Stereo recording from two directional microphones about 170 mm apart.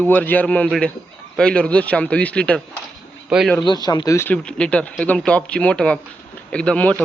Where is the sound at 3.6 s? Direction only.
25° left (ahead or behind).